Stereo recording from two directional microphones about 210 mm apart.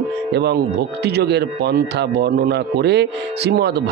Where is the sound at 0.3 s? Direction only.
50° right (ahead or behind).